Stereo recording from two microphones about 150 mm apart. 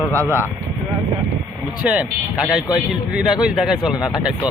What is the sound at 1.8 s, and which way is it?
A man's voice, 5° right (ahead or behind).